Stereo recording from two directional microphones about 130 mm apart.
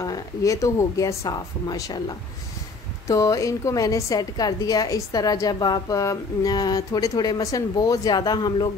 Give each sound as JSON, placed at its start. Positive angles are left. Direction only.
{"t": 0.0, "sound": "a woman's voice", "side_deg": 25}